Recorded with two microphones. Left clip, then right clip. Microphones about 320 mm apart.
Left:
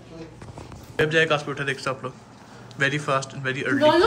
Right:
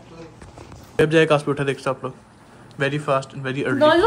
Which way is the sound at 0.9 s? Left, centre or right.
Centre.